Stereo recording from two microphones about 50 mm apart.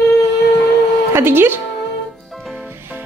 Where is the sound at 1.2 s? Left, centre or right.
Right.